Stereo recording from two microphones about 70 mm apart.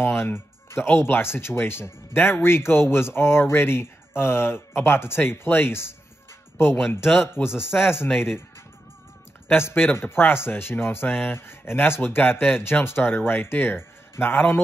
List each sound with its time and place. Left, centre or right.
0.2 s speech: left
7.4 s speech: centre
7.8 s speech: left
9.5 s speech: left